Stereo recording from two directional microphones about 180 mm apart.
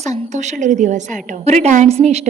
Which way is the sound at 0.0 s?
40° right (ahead or behind).